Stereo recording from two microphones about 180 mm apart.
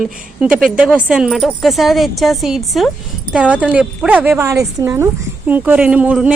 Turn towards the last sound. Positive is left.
turn(degrees=-10)  # may be behind; listen again after turning